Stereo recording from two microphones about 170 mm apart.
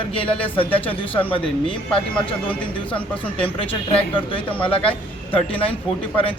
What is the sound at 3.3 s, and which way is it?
Speech, 30° left (ahead or behind).